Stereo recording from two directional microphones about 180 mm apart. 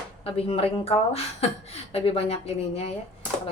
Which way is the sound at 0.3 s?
30° left (ahead or behind).